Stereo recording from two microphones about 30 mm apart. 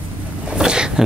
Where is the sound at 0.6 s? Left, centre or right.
Right.